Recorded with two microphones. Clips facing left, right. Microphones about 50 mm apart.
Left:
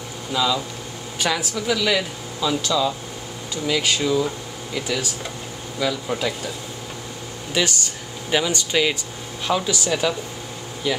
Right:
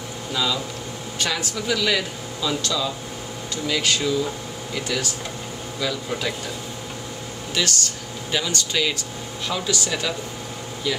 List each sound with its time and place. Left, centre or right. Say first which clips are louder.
0.3 s speech: left 3 dB; centre
7.5 s speech: left 2 dB; centre